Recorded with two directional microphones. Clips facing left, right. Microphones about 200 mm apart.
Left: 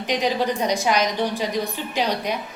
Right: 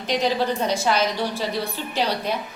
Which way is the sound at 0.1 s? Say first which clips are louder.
Even; 15° left (ahead or behind).